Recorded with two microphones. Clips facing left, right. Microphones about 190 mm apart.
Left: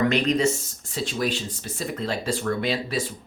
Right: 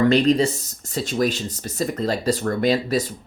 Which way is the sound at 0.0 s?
35° right (ahead or behind).